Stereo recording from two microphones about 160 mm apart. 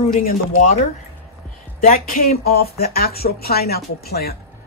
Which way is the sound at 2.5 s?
70° left (ahead or behind).